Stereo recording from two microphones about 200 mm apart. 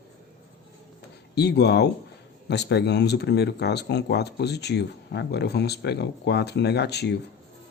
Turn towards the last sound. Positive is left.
turn(degrees=55)  # may be behind; listen again after turning